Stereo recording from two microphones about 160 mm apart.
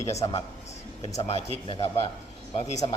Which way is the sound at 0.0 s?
45° left (ahead or behind).